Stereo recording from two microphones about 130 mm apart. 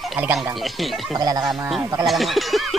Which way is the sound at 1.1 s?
30° right (ahead or behind).